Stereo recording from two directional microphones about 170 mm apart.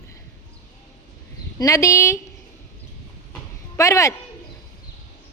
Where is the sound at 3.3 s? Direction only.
20° left (ahead or behind).